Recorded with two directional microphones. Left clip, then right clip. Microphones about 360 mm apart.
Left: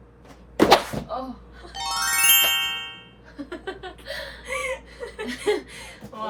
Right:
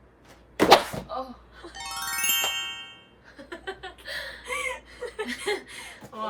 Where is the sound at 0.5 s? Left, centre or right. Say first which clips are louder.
Left 1 dB; centre.